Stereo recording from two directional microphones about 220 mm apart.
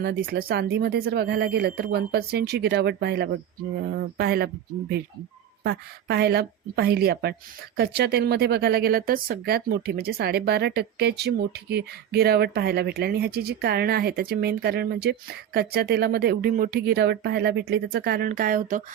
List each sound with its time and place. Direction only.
0.0 s speech: 45° right (ahead or behind)